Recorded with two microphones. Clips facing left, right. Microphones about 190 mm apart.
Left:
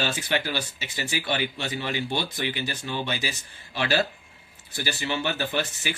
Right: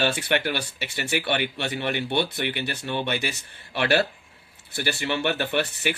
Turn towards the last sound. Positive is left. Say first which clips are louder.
# right 3 dB
turn(degrees=-60)  # may be behind; listen again after turning